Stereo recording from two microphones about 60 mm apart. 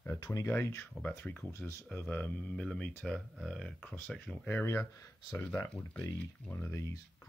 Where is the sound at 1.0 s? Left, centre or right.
Left.